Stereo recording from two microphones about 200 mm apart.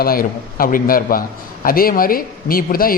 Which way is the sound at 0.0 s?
45° left (ahead or behind).